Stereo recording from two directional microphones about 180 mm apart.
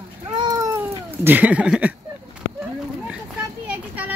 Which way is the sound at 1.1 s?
10° right (ahead or behind).